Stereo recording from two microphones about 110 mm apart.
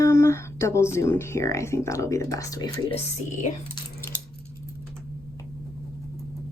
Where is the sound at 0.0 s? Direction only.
25° left (ahead or behind).